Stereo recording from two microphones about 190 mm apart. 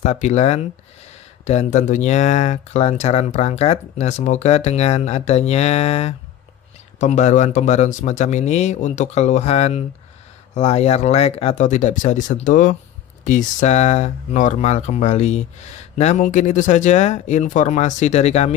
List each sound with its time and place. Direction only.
0.0 s speech: 35° left (ahead or behind)